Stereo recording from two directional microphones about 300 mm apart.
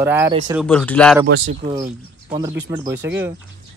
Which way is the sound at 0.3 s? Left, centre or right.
Centre.